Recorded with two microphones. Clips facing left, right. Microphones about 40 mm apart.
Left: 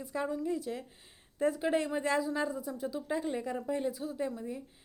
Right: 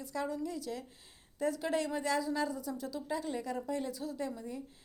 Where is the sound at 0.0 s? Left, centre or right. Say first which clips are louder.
Left 2 dB; left.